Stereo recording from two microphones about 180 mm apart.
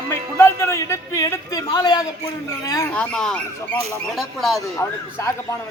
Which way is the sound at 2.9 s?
5° left (ahead or behind).